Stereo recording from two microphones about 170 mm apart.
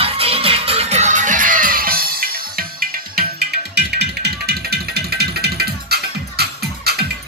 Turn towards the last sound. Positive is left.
turn(degrees=-70)  # may be behind; listen again after turning